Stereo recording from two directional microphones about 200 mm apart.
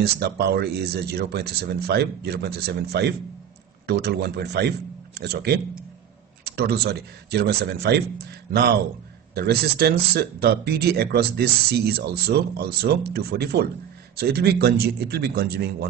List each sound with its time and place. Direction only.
0.0 s a man's voice: 55° right (ahead or behind)
9.3 s speech: 55° right (ahead or behind)